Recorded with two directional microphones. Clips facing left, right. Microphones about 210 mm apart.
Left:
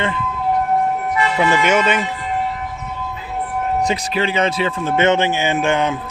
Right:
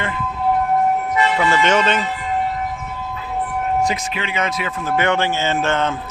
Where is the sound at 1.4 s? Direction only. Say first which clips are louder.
Left 3 dB; 15° left (ahead or behind).